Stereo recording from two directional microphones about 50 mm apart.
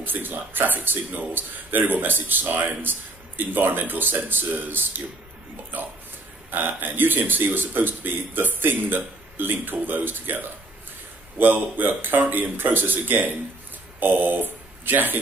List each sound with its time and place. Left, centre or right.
0.0 s a man's voice: right
6.5 s a man's voice: right